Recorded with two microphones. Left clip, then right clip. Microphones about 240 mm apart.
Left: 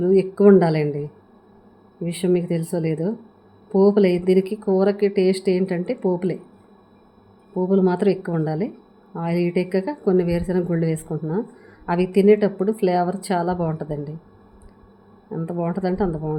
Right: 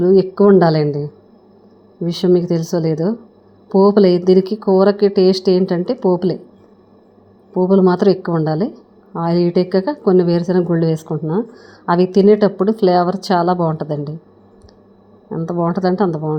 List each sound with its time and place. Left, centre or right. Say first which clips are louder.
0.0 s a woman's voice: right 4 dB; centre
2.0 s a woman's voice: right 7 dB; centre
7.5 s a woman's voice: right 7 dB; centre
15.3 s a woman's voice: right 7 dB; centre